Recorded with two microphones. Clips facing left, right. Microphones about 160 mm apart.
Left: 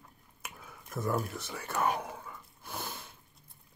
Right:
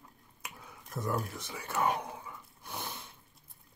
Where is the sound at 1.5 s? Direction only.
Centre (ahead or behind).